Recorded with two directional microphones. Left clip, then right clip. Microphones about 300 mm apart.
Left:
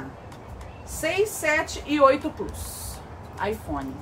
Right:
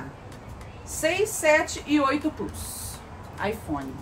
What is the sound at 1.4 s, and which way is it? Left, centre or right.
Speech, centre.